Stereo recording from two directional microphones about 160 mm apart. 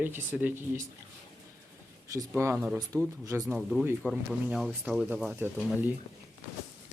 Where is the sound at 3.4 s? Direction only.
Centre (ahead or behind).